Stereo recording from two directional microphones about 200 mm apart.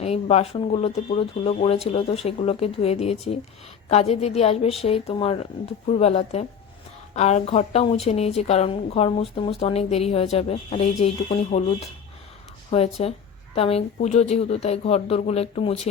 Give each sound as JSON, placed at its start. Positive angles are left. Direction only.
{"t": 0.0, "sound": "a woman's voice", "side_deg": 30}
{"t": 12.7, "sound": "a woman's voice", "side_deg": 30}